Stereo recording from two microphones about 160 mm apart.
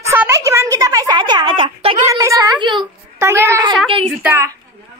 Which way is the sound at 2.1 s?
20° right (ahead or behind).